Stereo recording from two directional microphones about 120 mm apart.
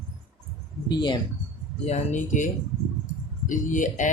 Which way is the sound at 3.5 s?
90° left.